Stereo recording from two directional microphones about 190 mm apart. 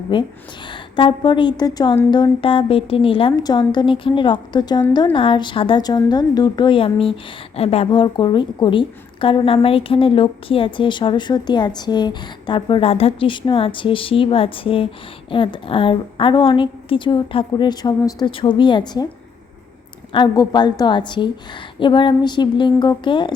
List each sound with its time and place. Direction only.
0.1 s a woman's voice: 25° left (ahead or behind)
20.1 s a woman's voice: 20° left (ahead or behind)